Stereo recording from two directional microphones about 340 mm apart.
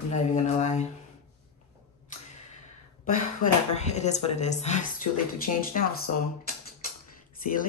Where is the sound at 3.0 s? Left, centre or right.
Left.